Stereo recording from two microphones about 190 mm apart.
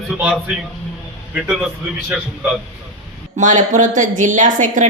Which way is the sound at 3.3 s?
40° right (ahead or behind).